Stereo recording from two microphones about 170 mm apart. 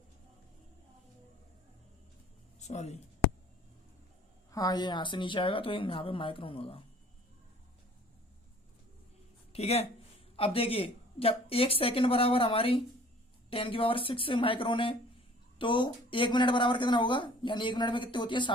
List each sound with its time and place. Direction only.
2.6 s speech: 40° left (ahead or behind)
4.5 s a woman's voice: 25° left (ahead or behind)
9.5 s a woman's voice: 35° left (ahead or behind)